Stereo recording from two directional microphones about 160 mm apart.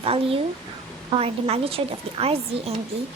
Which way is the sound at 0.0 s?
35° right (ahead or behind).